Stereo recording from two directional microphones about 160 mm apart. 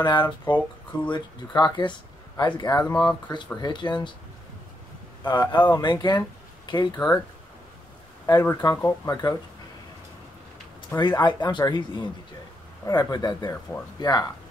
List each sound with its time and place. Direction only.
0.0 s speech: 30° left (ahead or behind)
5.2 s speech: 30° left (ahead or behind)
8.3 s speech: 20° left (ahead or behind)
11.0 s speech: 25° left (ahead or behind)